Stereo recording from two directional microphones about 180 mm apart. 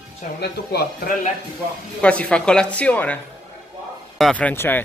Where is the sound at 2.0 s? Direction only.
5° left (ahead or behind).